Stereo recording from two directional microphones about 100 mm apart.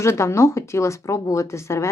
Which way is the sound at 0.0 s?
30° left (ahead or behind).